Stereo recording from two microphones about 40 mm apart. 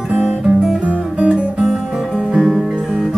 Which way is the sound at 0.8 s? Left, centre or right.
Right.